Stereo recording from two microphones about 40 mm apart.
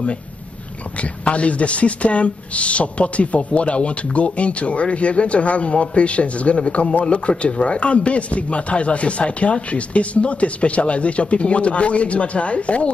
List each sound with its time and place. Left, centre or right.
1.0 s speech: left